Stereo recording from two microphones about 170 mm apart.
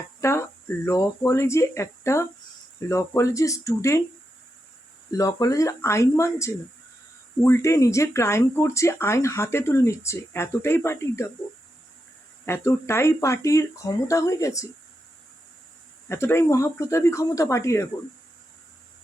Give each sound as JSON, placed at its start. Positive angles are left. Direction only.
{"t": 0.2, "sound": "cricket", "side_deg": 15}
{"t": 0.9, "sound": "speech", "side_deg": 15}
{"t": 5.1, "sound": "speech", "side_deg": 20}
{"t": 12.5, "sound": "speech", "side_deg": 15}
{"t": 16.0, "sound": "speech", "side_deg": 15}